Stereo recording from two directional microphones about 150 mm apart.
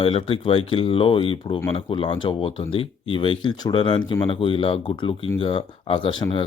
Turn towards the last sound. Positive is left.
turn(degrees=35)  # may be behind; listen again after turning